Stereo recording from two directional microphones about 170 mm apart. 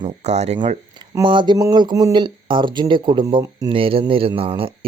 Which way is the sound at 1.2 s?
25° right (ahead or behind).